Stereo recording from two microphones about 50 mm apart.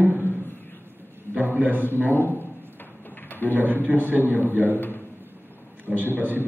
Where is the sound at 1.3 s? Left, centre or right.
Right.